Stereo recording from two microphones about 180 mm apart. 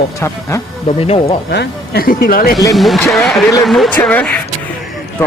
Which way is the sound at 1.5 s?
65° left (ahead or behind).